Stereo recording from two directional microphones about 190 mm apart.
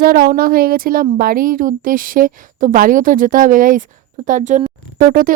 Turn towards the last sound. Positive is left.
turn(degrees=-45)  # may be behind; listen again after turning